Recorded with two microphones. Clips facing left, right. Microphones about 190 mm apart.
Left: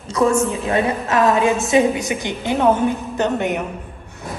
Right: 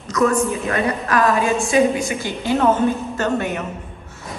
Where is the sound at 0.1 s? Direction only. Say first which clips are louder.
Left 1 dB; 30° left (ahead or behind).